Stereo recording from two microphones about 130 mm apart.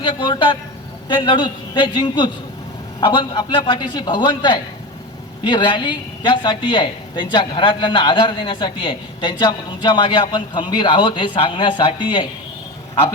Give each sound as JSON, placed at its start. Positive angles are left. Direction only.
{"t": 0.0, "sound": "speech", "side_deg": 35}